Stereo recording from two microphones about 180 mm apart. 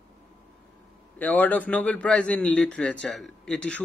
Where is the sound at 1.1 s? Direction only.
10° left (ahead or behind).